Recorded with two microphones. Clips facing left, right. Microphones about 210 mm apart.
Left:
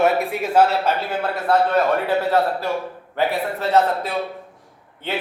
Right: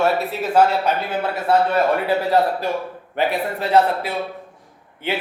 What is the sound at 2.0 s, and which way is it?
Speech, 15° right (ahead or behind).